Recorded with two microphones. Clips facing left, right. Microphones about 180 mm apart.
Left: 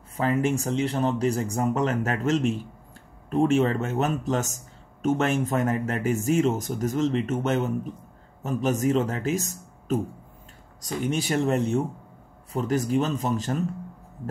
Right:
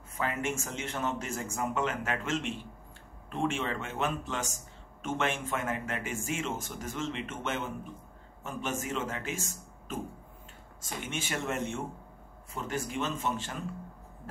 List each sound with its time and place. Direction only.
0.2 s speech: 35° left (ahead or behind)